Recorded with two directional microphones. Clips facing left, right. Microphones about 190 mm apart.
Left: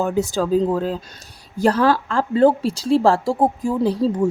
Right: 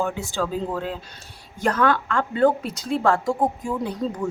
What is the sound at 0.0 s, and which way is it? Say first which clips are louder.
Speech: left 5 dB; 40° left (ahead or behind).